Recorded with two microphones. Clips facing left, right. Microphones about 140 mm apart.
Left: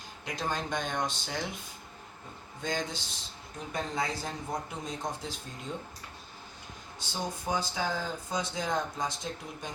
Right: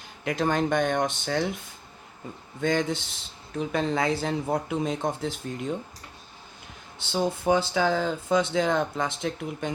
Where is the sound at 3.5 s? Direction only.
85° right; by 5.7 s 65° right (ahead or behind).